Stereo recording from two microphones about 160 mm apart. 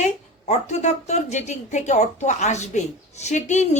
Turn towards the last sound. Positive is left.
turn(degrees=45)  # may be behind; listen again after turning